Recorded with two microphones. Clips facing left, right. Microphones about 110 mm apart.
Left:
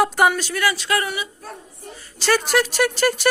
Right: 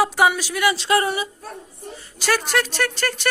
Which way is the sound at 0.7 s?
25° right (ahead or behind).